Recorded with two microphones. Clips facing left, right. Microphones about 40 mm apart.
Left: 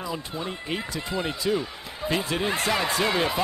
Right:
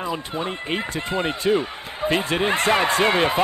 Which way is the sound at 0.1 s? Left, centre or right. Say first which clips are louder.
Right 5 dB; right.